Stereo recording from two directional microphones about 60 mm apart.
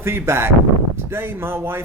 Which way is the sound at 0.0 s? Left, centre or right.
Right.